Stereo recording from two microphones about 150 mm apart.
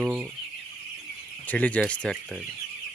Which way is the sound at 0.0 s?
5° right (ahead or behind).